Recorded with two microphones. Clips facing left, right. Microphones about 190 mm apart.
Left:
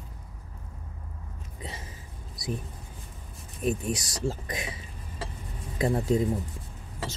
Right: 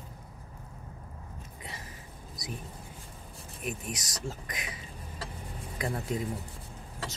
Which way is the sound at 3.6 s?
30° left (ahead or behind).